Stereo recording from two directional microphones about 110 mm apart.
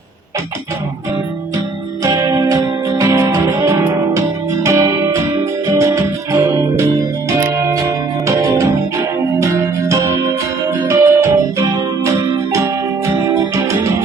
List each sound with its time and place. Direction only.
2.0 s music: 30° right (ahead or behind)